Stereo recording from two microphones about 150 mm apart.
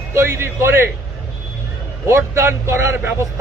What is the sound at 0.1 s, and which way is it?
Speech, 15° right (ahead or behind).